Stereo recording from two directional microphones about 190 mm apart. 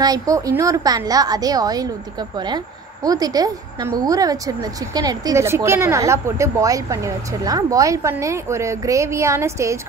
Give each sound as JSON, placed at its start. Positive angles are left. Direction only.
{"t": 0.0, "sound": "a woman's voice", "side_deg": -20}